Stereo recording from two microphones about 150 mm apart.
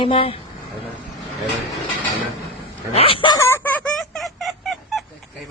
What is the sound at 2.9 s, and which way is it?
Speech, 40° left (ahead or behind).